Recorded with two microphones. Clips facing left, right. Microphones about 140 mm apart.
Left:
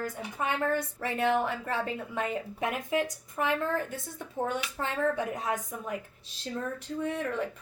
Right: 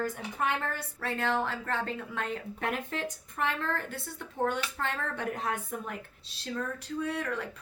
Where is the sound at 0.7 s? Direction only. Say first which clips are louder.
Left 4 dB; 15° left (ahead or behind).